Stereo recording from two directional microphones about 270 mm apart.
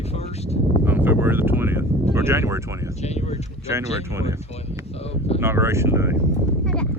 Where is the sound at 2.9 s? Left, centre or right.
Left.